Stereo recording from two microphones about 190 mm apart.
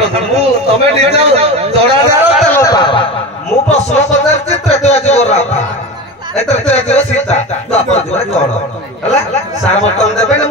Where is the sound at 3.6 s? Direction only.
35° left (ahead or behind).